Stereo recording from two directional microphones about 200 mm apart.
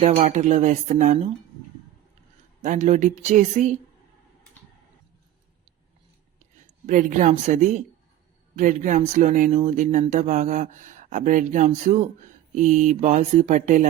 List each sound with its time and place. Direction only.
0.0 s speech: 35° right (ahead or behind)
2.6 s speech: 35° right (ahead or behind)
6.8 s speech: 40° right (ahead or behind)